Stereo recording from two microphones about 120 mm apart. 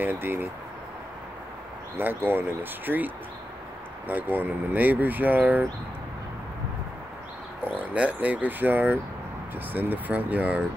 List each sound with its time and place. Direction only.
0.0 s speech: 20° right (ahead or behind)
2.0 s speech: 15° right (ahead or behind)
4.1 s speech: 15° right (ahead or behind)
7.8 s speech: 10° right (ahead or behind)